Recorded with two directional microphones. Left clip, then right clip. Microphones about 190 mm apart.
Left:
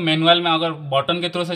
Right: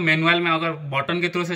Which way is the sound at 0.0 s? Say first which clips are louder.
Left 3 dB; 50° left (ahead or behind).